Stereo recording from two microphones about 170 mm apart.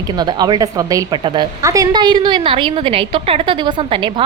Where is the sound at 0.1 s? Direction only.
25° right (ahead or behind).